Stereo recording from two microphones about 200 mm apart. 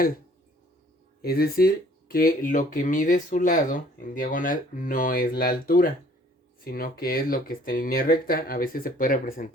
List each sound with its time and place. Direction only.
1.2 s speech: 50° left (ahead or behind)